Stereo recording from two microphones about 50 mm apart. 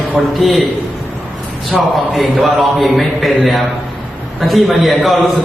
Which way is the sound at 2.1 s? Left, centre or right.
Centre.